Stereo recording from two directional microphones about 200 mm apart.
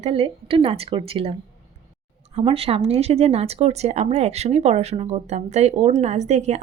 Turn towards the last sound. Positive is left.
turn(degrees=-35)  # may be behind; listen again after turning